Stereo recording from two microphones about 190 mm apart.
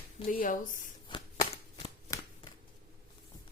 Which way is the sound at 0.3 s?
45° left (ahead or behind).